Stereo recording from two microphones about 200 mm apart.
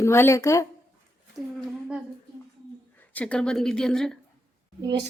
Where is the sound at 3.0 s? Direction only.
10° left (ahead or behind).